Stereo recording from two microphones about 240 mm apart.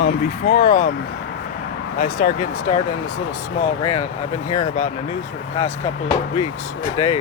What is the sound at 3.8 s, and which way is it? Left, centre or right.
Speech, left.